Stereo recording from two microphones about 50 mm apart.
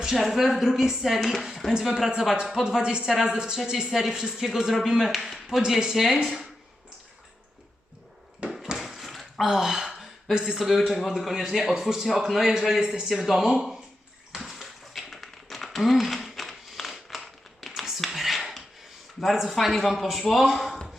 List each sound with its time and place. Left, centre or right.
0.0 s a man's voice: centre
8.4 s a sound: centre
8.8 s dog: centre
9.5 s a man's voice: centre
14.3 s a sound: centre
19.2 s a man's voice: centre